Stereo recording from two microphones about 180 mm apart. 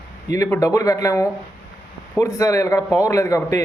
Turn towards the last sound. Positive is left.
turn(degrees=15)  # may be behind; listen again after turning